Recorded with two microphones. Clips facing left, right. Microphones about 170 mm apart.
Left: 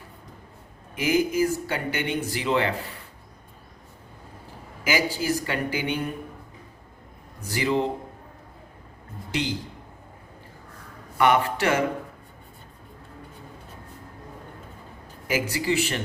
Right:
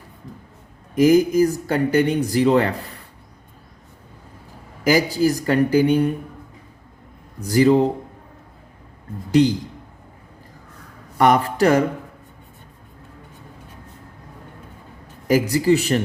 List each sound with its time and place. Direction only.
0.9 s speech: 40° right (ahead or behind)
4.8 s speech: 40° right (ahead or behind)
7.4 s speech: 40° right (ahead or behind)
9.3 s speech: 40° right (ahead or behind)
11.2 s speech: 40° right (ahead or behind)
15.3 s speech: 40° right (ahead or behind)